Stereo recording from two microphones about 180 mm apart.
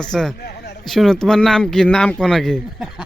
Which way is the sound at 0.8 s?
Centre (ahead or behind).